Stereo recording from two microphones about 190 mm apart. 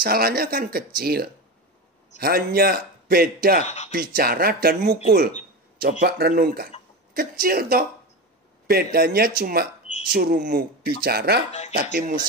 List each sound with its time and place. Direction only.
0.0 s speech: 50° right (ahead or behind)
3.6 s speech: 35° left (ahead or behind)
3.9 s speech: 50° right (ahead or behind)